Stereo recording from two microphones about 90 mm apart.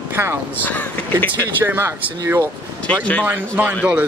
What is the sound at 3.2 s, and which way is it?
Speech, 20° right (ahead or behind).